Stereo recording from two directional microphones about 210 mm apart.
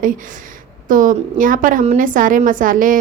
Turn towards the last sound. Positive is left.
turn(degrees=-40)  # may be behind; listen again after turning